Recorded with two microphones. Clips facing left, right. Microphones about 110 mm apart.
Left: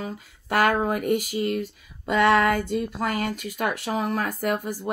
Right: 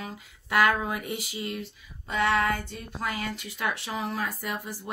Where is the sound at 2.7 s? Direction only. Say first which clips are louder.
Left 8 dB; 65° left (ahead or behind).